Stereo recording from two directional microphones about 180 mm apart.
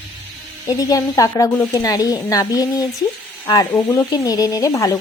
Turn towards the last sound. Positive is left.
turn(degrees=20)  # may be behind; listen again after turning